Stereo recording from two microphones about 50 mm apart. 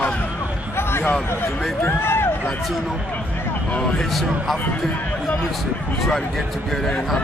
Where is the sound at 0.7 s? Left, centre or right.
Left.